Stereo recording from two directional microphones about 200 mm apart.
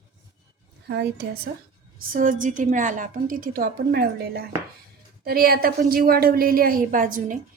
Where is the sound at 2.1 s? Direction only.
40° right (ahead or behind).